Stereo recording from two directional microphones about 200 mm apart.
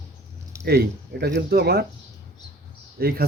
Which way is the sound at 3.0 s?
50° right (ahead or behind).